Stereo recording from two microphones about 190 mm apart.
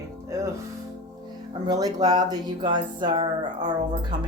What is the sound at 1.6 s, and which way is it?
Speech, 20° right (ahead or behind).